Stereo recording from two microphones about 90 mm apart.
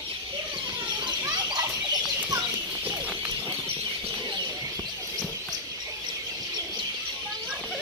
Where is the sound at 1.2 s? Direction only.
50° right (ahead or behind).